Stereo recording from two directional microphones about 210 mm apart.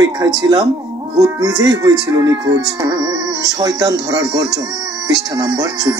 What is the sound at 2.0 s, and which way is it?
Music, 15° right (ahead or behind).